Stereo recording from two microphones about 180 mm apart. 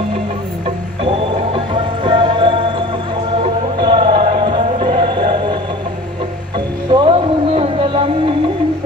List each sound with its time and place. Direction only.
1.0 s music: 30° right (ahead or behind)
3.7 s music: 25° right (ahead or behind)
6.9 s a sound: 30° right (ahead or behind)